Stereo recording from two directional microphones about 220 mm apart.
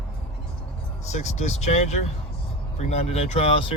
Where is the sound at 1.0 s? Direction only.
30° left (ahead or behind).